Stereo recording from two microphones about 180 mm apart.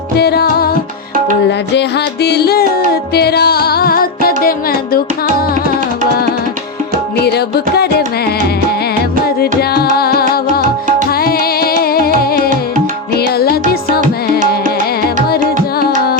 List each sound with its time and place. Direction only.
0.2 s music: 60° left (ahead or behind)
2.2 s music: 65° left (ahead or behind)
7.3 s music: 65° left (ahead or behind)
9.2 s music: 60° left (ahead or behind)
12.4 s music: 45° right (ahead or behind)
13.1 s music: 60° left (ahead or behind)